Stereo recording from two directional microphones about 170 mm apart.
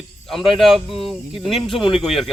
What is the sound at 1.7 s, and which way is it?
Speech, 30° left (ahead or behind).